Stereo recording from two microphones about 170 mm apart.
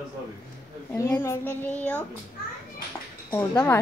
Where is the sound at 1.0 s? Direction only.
10° left (ahead or behind).